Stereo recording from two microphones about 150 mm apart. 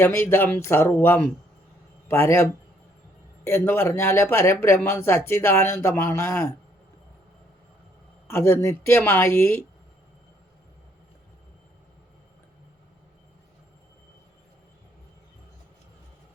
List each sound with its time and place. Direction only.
0.0 s speech: 15° left (ahead or behind)
8.3 s speech: 15° left (ahead or behind)